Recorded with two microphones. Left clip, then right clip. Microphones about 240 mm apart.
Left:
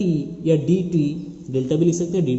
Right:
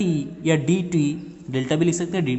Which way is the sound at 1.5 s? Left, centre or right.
Right.